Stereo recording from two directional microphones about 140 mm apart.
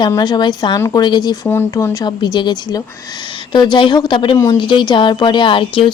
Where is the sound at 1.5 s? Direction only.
15° left (ahead or behind); by 5.9 s 35° left (ahead or behind).